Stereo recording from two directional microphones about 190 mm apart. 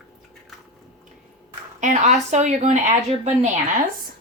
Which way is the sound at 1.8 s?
40° right (ahead or behind).